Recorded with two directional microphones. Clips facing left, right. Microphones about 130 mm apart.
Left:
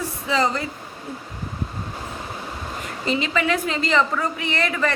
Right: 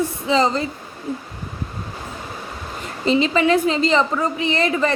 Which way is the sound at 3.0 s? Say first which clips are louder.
Right 6 dB; 25° right (ahead or behind).